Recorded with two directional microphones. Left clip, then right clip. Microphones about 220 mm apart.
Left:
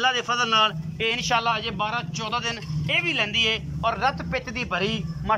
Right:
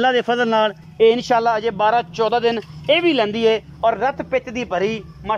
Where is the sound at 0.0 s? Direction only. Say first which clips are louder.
Right 6 dB; 35° right (ahead or behind).